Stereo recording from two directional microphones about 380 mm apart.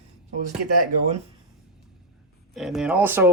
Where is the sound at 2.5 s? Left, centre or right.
Centre.